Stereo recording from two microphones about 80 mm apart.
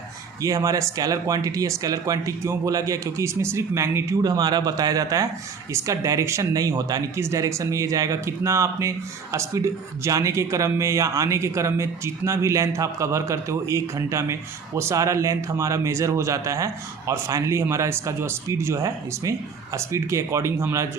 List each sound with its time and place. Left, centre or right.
0.4 s speech: right
4.2 s speech: right
7.2 s speech: right